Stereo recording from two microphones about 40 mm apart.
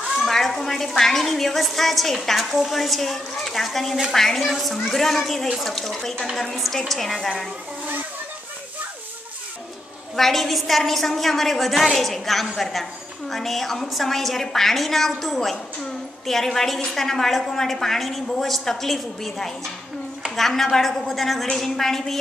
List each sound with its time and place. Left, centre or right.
0.2 s a sound: centre
0.6 s a woman's voice: centre
7.2 s a woman's voice: centre
10.1 s a woman's voice: centre